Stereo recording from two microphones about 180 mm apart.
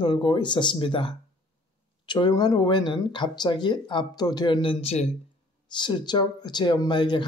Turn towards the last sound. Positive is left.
turn(degrees=25)  # may be behind; listen again after turning